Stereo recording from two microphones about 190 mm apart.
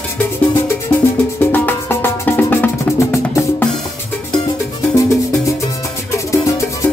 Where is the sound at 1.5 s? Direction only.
10° left (ahead or behind).